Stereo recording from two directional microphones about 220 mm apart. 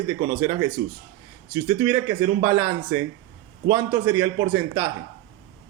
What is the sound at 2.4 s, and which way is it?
A man's voice, 10° right (ahead or behind).